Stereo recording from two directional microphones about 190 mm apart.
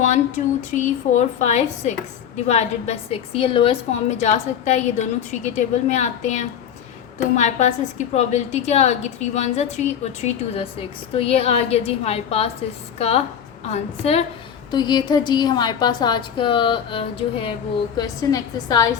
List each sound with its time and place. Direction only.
0.0 s a sound: 40° left (ahead or behind)
1.1 s a woman's voice: 40° left (ahead or behind)
14.7 s a woman's voice: 20° left (ahead or behind)